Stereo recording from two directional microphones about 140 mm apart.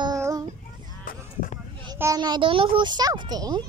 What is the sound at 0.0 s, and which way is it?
Child singing, 25° right (ahead or behind).